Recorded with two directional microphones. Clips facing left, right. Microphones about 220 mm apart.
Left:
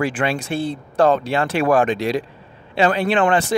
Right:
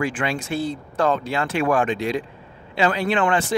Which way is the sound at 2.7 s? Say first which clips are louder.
Left 3 dB; 55° left (ahead or behind).